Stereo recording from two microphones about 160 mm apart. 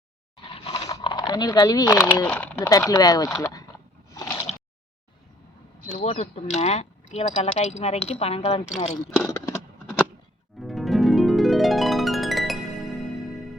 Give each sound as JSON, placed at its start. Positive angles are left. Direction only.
{"t": 0.7, "sound": "a sound", "side_deg": 20}
{"t": 2.2, "sound": "speech", "side_deg": 10}
{"t": 2.6, "sound": "speech", "side_deg": 25}
{"t": 4.1, "sound": "a sound", "side_deg": 20}
{"t": 5.9, "sound": "speech", "side_deg": 40}
{"t": 10.6, "sound": "harp", "side_deg": 0}
{"t": 13.0, "sound": "music", "side_deg": 0}